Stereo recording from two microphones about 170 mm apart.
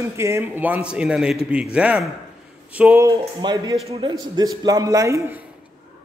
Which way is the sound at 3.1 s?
25° right (ahead or behind).